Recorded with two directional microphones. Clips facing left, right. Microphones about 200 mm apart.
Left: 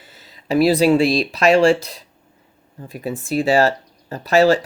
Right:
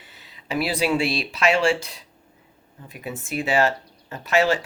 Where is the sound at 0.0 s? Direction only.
40° left (ahead or behind).